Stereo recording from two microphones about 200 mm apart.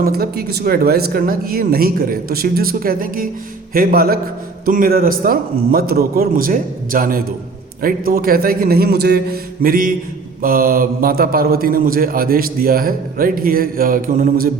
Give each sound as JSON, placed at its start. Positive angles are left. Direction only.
{"t": 0.0, "sound": "a man's voice", "side_deg": -50}